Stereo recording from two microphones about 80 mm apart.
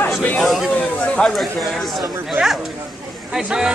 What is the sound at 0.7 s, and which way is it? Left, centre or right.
Chatter, centre.